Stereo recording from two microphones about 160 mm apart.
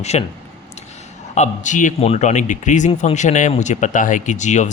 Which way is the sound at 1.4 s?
50° left (ahead or behind).